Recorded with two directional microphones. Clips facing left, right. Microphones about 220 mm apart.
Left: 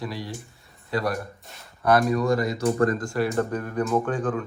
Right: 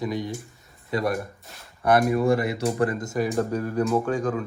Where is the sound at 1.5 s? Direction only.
Centre (ahead or behind).